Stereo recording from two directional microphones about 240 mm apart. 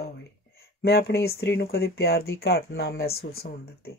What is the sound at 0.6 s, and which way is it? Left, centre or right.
Speech, left.